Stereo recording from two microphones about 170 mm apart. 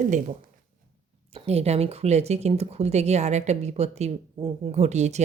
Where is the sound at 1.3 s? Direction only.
40° right (ahead or behind).